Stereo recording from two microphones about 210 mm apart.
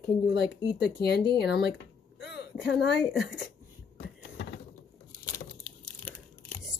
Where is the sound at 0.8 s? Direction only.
50° left (ahead or behind).